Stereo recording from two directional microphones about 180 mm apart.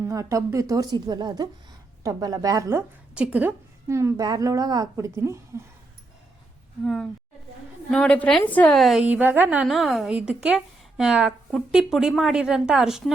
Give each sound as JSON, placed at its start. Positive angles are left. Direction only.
{"t": 0.0, "sound": "speech", "side_deg": -15}
{"t": 3.2, "sound": "a woman's voice", "side_deg": -5}
{"t": 6.8, "sound": "a woman's voice", "side_deg": 0}